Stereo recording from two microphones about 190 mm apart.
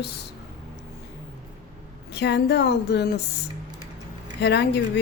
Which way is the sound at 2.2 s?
65° left (ahead or behind).